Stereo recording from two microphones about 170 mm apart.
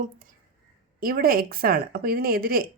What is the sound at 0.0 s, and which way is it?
A woman's voice, 55° right (ahead or behind).